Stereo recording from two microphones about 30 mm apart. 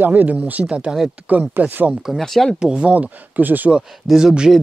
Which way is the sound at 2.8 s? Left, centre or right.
Right.